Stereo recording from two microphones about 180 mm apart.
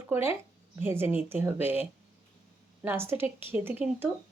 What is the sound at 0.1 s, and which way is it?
Speech, 10° right (ahead or behind).